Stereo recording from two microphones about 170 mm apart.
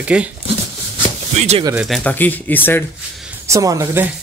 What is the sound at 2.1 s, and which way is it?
Speech, 10° left (ahead or behind).